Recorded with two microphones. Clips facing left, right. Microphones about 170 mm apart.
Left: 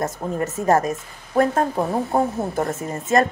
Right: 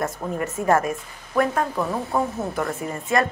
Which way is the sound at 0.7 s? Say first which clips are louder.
Left 1 dB; 40° left (ahead or behind).